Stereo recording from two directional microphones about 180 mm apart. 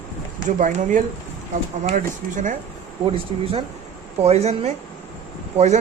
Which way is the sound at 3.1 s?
30° right (ahead or behind).